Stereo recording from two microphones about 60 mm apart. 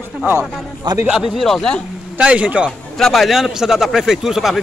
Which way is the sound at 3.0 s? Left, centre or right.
Centre.